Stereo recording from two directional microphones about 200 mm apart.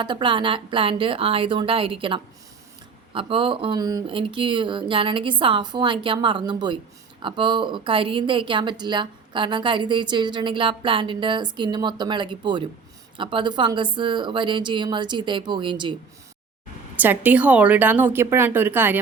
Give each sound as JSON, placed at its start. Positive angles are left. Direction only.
{"t": 0.0, "sound": "a woman's voice", "side_deg": -25}
{"t": 17.0, "sound": "a woman's voice", "side_deg": -10}